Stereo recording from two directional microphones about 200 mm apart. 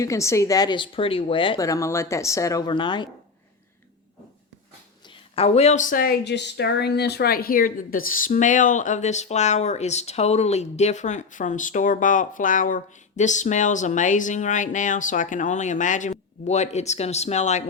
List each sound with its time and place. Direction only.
0.0 s speech: 15° left (ahead or behind)
5.3 s speech: 30° left (ahead or behind)